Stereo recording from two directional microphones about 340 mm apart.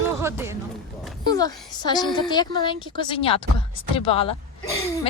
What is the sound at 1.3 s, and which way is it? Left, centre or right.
Speech, centre.